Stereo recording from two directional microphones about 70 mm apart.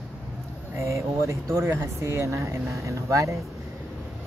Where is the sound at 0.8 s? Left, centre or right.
Right.